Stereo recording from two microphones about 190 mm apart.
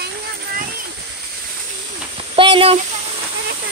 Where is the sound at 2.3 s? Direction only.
30° right (ahead or behind).